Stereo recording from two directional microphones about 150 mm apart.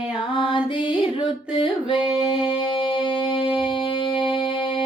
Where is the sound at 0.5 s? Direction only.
35° left (ahead or behind).